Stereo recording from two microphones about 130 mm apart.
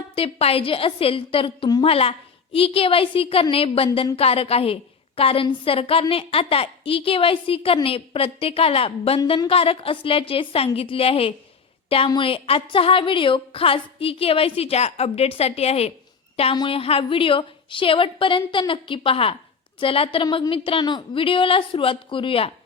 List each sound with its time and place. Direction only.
0.2 s a woman's voice: 45° left (ahead or behind)